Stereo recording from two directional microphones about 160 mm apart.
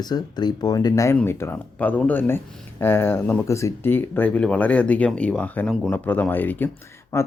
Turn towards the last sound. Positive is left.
turn(degrees=15)  # may be behind; listen again after turning